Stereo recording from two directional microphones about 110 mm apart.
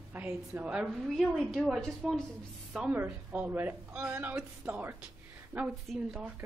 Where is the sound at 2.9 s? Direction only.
15° right (ahead or behind).